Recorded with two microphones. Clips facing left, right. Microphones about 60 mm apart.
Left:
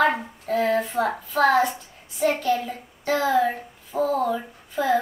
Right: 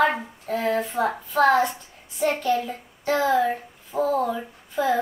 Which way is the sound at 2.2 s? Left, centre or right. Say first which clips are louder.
Even; centre.